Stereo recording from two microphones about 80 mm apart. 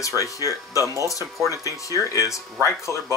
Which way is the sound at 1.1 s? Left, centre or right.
Left.